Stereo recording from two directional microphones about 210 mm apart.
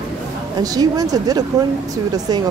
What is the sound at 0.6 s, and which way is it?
Speech, 15° right (ahead or behind).